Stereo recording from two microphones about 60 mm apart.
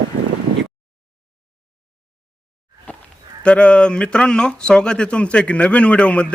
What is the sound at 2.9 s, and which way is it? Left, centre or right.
Livestock, left.